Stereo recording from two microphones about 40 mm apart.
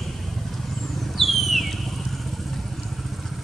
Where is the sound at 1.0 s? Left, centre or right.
Centre.